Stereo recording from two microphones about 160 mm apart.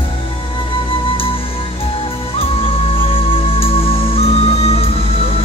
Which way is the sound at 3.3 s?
35° left (ahead or behind).